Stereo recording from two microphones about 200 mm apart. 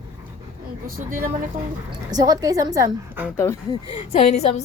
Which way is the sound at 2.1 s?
20° right (ahead or behind).